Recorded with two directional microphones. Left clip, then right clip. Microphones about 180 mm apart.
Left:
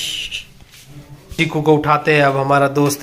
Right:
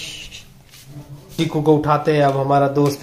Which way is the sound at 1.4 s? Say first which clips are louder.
Left 2 dB; 5° right (ahead or behind).